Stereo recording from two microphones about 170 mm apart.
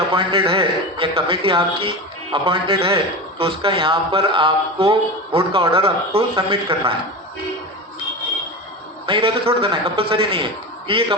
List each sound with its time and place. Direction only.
0.1 s a man's voice: 30° right (ahead or behind)
9.0 s a man's voice: 30° right (ahead or behind)